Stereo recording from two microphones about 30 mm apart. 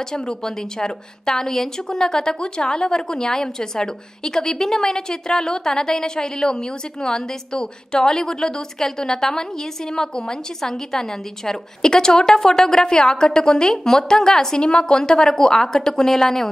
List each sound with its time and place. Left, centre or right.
0.1 s a woman's voice: centre
14.6 s a woman's voice: left; by 16.4 s centre